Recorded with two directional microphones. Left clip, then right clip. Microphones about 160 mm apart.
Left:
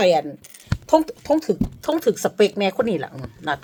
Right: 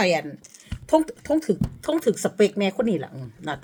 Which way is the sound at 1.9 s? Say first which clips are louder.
Left 3 dB; 15° right (ahead or behind).